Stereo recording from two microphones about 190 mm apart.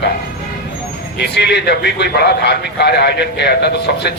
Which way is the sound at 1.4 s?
60° left (ahead or behind).